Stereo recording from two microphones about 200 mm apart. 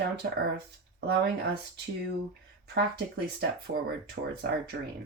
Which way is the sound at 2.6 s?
55° right (ahead or behind).